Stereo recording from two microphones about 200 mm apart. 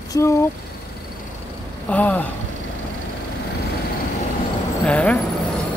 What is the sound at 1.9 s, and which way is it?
Speech, 10° left (ahead or behind).